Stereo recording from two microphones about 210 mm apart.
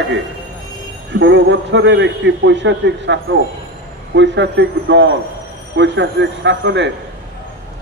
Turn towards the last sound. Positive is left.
turn(degrees=-60)  # may be behind; listen again after turning